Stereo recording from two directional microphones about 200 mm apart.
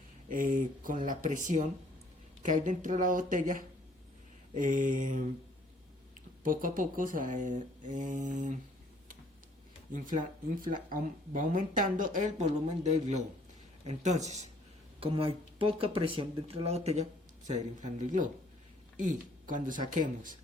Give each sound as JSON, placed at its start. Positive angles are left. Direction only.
{"t": 0.3, "sound": "speech", "side_deg": -40}
{"t": 6.4, "sound": "speech", "side_deg": -45}
{"t": 9.9, "sound": "speech", "side_deg": -40}